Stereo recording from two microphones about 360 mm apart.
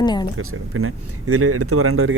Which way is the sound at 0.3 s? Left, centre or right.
Right.